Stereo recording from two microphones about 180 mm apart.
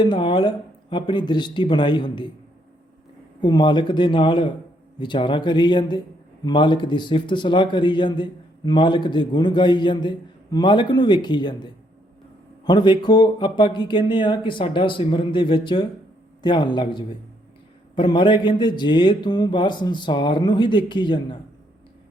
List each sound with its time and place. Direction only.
0.0 s a man's voice: 25° left (ahead or behind)
3.4 s a man's voice: 25° left (ahead or behind)